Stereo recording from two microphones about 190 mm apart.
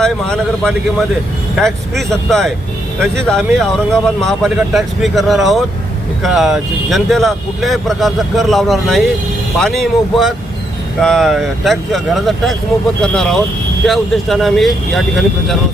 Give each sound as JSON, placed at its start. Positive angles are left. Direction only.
{"t": 0.0, "sound": "speech", "side_deg": 5}